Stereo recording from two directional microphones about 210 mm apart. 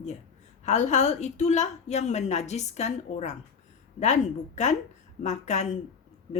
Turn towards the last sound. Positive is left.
turn(degrees=35)  # may be behind; listen again after turning